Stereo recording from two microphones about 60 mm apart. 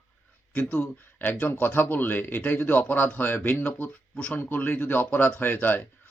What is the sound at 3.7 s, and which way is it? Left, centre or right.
Speech, left.